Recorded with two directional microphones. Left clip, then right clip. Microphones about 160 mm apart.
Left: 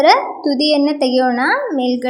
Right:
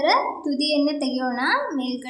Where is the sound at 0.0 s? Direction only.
35° left (ahead or behind).